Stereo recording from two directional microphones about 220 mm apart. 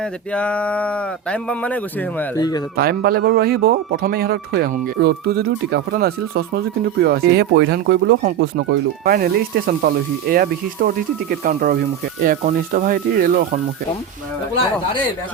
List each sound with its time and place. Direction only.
0.0 s speech: 5° left (ahead or behind)
2.7 s speech: 45° right (ahead or behind)